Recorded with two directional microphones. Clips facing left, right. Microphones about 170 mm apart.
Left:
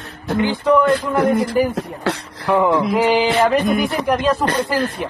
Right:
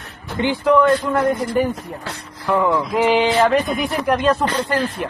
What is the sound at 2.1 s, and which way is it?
Speech, 75° left (ahead or behind).